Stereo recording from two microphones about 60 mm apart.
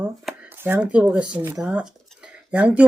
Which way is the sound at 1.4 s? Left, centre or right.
Right.